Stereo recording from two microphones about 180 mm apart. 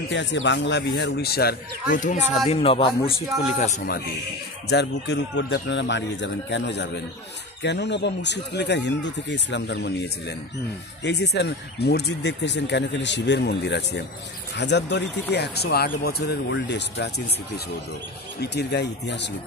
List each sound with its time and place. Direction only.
0.1 s speech: 80° left; by 3.1 s 30° left (ahead or behind)
4.6 s speech: 70° left (ahead or behind)
11.1 s speech: 70° left (ahead or behind)
18.4 s speech: 70° left (ahead or behind)